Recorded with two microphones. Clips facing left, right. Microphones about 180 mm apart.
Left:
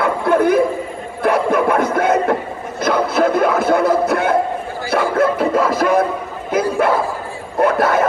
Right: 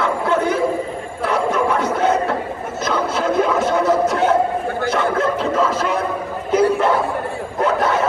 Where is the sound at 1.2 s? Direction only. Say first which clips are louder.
Left 3 dB; 10° left (ahead or behind).